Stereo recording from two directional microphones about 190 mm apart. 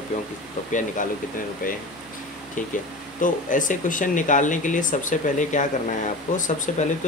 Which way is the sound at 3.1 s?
45° left (ahead or behind).